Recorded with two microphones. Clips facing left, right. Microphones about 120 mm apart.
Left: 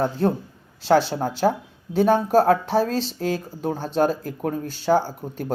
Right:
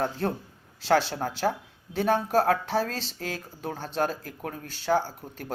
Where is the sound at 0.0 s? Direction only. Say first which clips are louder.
Left 6 dB; 20° left (ahead or behind).